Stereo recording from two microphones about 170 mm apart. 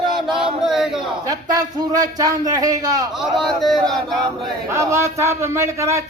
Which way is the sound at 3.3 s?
Centre (ahead or behind).